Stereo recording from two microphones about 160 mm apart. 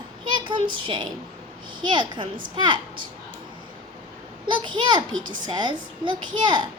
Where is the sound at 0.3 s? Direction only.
30° right (ahead or behind).